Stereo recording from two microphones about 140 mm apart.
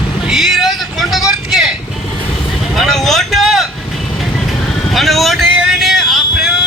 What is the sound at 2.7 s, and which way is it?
Vehicle, centre (ahead or behind).